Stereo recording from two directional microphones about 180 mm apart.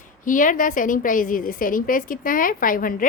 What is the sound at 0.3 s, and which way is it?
A woman's voice, 45° left (ahead or behind).